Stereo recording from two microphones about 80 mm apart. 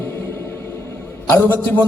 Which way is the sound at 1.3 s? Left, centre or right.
Left.